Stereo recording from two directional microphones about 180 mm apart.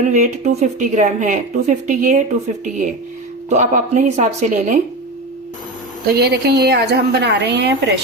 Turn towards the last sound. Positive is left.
turn(degrees=-70)  # may be behind; listen again after turning